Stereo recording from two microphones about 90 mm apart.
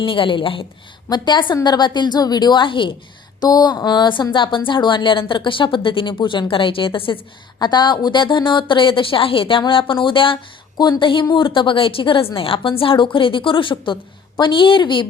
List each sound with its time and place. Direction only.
0.0 s a woman's voice: 75° left (ahead or behind)
1.1 s speech: 55° left (ahead or behind)
3.4 s speech: 50° left (ahead or behind); by 6.4 s 65° left (ahead or behind)
6.5 s a woman's voice: 75° left (ahead or behind)
7.6 s a woman's voice: 55° left (ahead or behind)
10.8 s a woman's voice: 55° left (ahead or behind); by 13.1 s 85° left
13.1 s a woman's voice: 70° left (ahead or behind)